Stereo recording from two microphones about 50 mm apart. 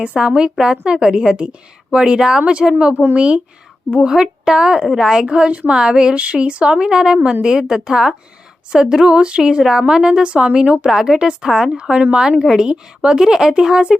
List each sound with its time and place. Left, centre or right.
0.0 s a woman's voice: right
3.9 s a woman's voice: centre